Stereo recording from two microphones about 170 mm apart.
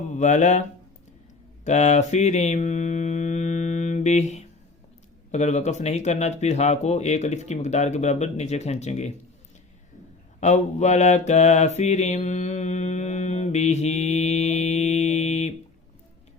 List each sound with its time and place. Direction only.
0.1 s speech: 45° left (ahead or behind)
1.6 s mantra: 45° left (ahead or behind)
5.3 s speech: 40° left (ahead or behind)
10.4 s mantra: 40° left (ahead or behind)